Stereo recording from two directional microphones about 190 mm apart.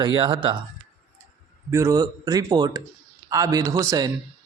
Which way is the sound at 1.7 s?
15° right (ahead or behind).